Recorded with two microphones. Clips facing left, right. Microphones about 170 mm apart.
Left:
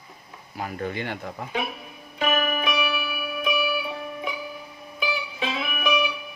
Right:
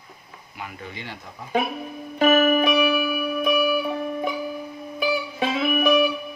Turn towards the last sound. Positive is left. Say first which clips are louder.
# right 7 dB
turn(degrees=-45)  # may be behind; listen again after turning